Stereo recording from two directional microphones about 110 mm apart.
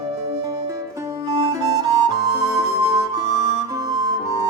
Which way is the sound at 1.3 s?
45° right (ahead or behind).